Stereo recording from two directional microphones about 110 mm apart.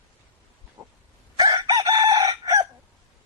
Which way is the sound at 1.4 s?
35° right (ahead or behind).